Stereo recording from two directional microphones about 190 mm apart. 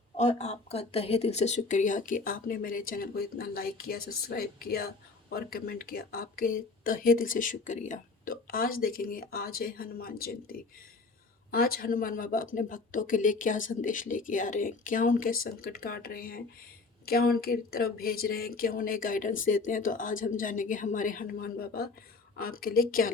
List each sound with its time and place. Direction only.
0.2 s speech: 35° left (ahead or behind)